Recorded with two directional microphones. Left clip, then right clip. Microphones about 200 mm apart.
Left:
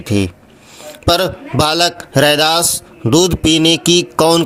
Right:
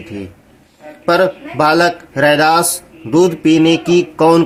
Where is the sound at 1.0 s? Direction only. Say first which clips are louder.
Right 2 dB; 40° left (ahead or behind).